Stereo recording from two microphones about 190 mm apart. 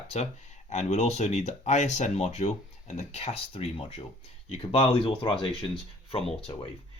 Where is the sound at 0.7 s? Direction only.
35° left (ahead or behind).